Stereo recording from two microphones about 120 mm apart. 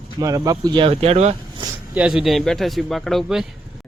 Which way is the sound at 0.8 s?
55° right (ahead or behind).